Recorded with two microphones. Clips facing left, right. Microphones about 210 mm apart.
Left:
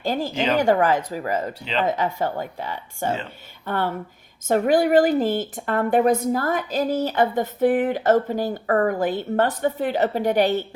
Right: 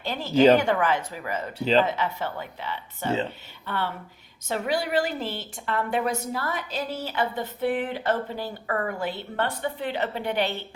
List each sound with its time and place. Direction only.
0.0 s speech: 45° left (ahead or behind)
0.3 s speech: 40° right (ahead or behind)
0.6 s speech: 40° left (ahead or behind)